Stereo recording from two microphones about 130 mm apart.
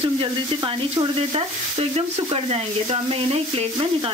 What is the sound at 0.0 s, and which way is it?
Stir, 45° right (ahead or behind).